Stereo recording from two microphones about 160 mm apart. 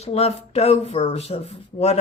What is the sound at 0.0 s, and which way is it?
Speech, 40° left (ahead or behind).